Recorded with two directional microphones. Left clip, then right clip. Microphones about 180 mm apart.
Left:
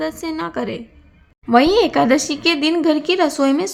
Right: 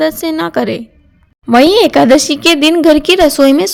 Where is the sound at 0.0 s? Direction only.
35° right (ahead or behind).